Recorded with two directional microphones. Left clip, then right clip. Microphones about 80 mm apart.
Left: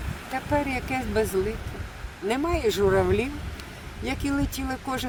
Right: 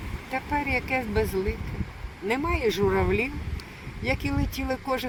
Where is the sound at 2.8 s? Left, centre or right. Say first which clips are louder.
Left 3 dB; centre.